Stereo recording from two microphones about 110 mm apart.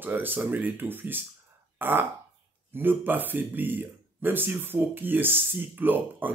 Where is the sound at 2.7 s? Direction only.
20° right (ahead or behind).